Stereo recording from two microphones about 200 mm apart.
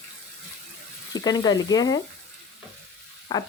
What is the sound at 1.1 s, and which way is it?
Speech, 20° left (ahead or behind).